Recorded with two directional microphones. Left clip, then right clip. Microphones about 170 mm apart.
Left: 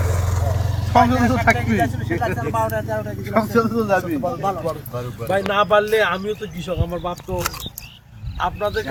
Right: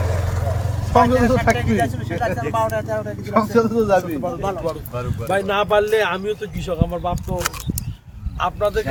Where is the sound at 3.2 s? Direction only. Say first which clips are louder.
Right 1 dB; 75° right (ahead or behind).